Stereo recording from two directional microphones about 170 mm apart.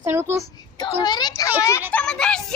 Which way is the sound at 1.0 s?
25° left (ahead or behind).